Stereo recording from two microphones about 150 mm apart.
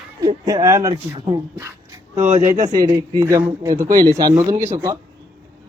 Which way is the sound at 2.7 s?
25° right (ahead or behind).